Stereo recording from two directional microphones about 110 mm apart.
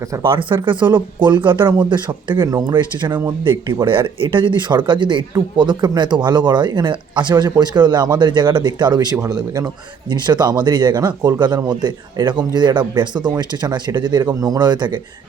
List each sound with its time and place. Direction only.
0.3 s speech: 50° right (ahead or behind)
9.1 s a man's voice: 30° right (ahead or behind)